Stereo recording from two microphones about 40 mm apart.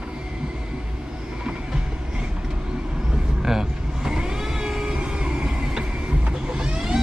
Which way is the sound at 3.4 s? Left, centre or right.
Centre.